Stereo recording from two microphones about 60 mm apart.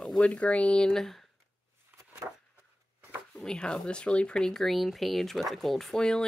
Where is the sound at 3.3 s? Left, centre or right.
Centre.